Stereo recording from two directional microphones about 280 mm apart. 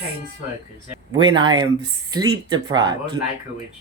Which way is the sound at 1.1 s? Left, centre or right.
Centre.